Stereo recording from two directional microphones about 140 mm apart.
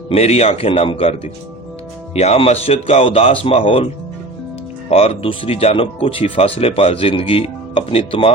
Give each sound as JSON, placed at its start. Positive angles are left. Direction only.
{"t": 0.1, "sound": "speech", "side_deg": 50}
{"t": 4.9, "sound": "speech", "side_deg": 45}